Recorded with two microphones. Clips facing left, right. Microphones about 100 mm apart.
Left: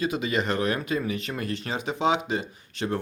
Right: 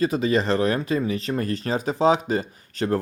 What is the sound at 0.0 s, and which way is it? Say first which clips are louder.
Speech: right 5 dB; 35° right (ahead or behind).